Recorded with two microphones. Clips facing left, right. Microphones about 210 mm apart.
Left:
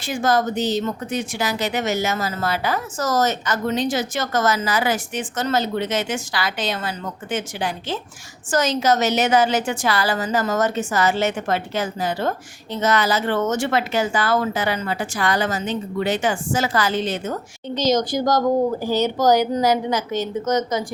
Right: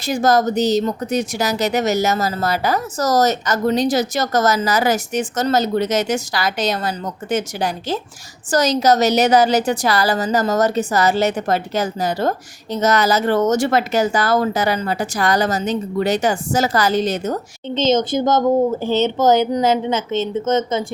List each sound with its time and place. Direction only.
0.0 s speech: 40° right (ahead or behind)
17.7 s speech: 25° right (ahead or behind)